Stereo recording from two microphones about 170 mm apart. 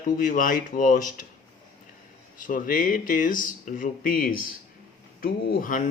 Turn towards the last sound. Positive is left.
turn(degrees=50)  # may be behind; listen again after turning